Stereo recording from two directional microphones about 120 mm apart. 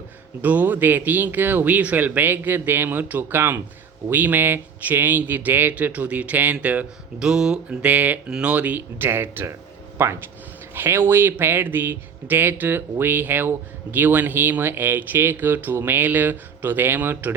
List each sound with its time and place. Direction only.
0.4 s speech: 15° right (ahead or behind)